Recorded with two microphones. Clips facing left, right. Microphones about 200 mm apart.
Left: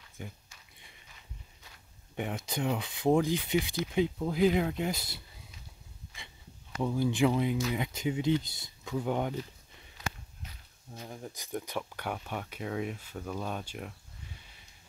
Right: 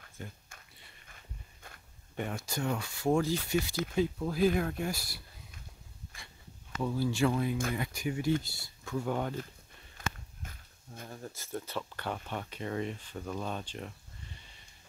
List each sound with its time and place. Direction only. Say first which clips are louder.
0.2 s speech: left 1 dB; 15° left (ahead or behind)
2.1 s speech: left 2 dB; 15° left (ahead or behind)
6.8 s speech: left 2 dB; 20° left (ahead or behind)
10.0 s a sound: right 1 dB; 50° right (ahead or behind)
11.1 s speech: left 1 dB; 10° left (ahead or behind)